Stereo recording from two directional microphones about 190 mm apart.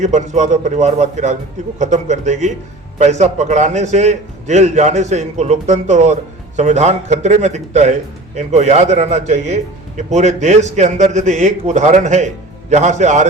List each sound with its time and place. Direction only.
0.0 s a man's voice: 40° right (ahead or behind)